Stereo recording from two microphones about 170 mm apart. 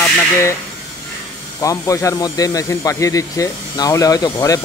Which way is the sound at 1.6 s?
20° left (ahead or behind).